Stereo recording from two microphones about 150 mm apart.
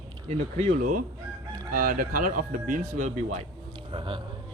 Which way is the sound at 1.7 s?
70° right (ahead or behind).